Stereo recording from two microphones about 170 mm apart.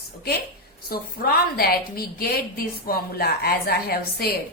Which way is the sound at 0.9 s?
60° left (ahead or behind).